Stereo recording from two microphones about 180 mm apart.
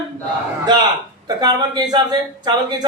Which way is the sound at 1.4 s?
25° right (ahead or behind).